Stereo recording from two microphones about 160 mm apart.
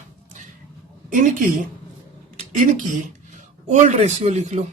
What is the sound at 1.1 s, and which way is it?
Speech, 55° right (ahead or behind).